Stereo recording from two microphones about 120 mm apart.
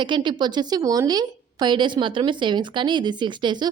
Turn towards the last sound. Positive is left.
turn(degrees=-40)  # may be behind; listen again after turning